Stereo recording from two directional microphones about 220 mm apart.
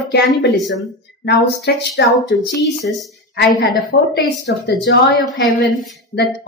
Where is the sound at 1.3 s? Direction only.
50° left (ahead or behind).